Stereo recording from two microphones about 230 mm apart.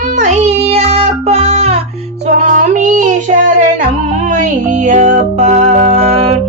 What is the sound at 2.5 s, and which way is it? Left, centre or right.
Child singing, right.